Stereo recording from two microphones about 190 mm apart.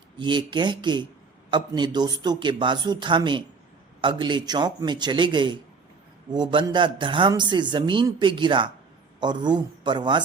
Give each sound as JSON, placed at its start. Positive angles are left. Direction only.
{"t": 0.2, "sound": "a man's voice", "side_deg": -25}